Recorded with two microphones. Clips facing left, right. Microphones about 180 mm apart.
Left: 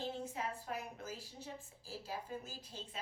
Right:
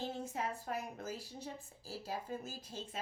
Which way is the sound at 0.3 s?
40° right (ahead or behind).